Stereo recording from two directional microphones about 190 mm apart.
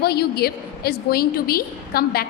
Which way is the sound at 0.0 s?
55° left (ahead or behind).